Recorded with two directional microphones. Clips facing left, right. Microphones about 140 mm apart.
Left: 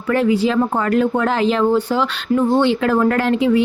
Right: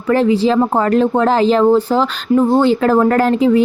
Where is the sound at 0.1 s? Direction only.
30° right (ahead or behind).